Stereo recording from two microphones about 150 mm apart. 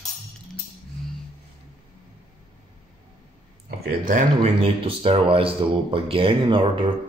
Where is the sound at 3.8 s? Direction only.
70° right (ahead or behind).